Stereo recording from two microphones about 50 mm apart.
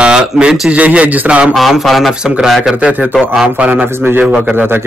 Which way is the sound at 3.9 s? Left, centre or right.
Right.